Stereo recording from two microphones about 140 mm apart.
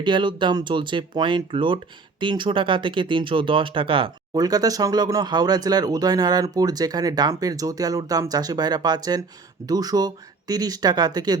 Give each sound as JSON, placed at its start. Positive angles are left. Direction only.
{"t": 0.0, "sound": "speech", "side_deg": -35}